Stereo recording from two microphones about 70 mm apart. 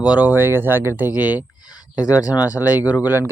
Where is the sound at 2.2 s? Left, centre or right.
Left.